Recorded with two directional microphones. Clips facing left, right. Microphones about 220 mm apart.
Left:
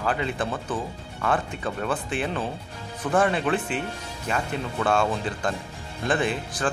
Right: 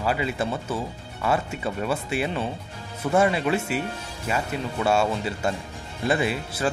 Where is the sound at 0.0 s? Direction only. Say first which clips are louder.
Right 1 dB; 10° right (ahead or behind).